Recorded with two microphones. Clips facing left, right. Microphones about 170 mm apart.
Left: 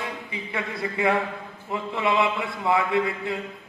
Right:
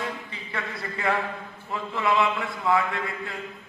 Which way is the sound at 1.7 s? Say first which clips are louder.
Left 1 dB; 20° left (ahead or behind).